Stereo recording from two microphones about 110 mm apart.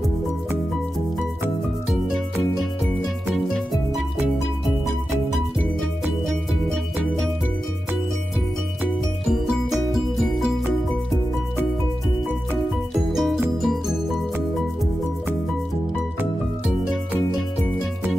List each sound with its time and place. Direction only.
3.5 s music: centre (ahead or behind)
6.2 s music: centre (ahead or behind)
12.9 s music: centre (ahead or behind)